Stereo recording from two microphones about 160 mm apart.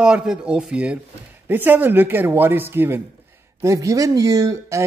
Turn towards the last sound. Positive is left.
turn(degrees=-20)  # may be behind; listen again after turning